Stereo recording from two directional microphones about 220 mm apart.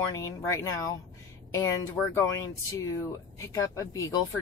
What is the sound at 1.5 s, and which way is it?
Speech, 15° left (ahead or behind).